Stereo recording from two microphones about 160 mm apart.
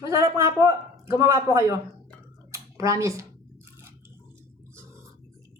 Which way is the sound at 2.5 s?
20° right (ahead or behind).